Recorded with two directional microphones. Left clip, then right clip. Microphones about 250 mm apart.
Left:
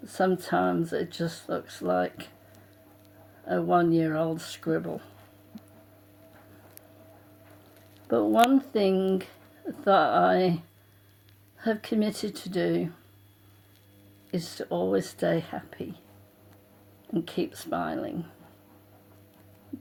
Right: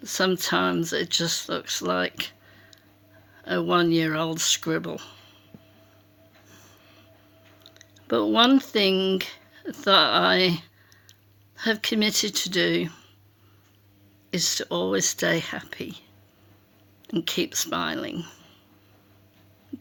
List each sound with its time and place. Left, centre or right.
0.0 s speech: right
3.4 s speech: right
8.0 s speech: right
11.6 s speech: centre
14.3 s speech: centre
17.1 s speech: right